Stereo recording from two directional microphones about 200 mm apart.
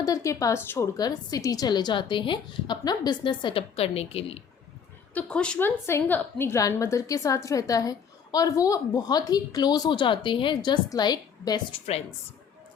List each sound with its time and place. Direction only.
0.0 s a woman's voice: 15° left (ahead or behind)
5.1 s a woman's voice: 5° left (ahead or behind); by 12.0 s 30° left (ahead or behind)